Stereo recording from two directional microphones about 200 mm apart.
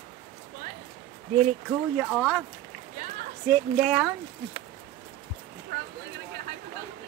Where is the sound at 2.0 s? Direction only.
Centre (ahead or behind).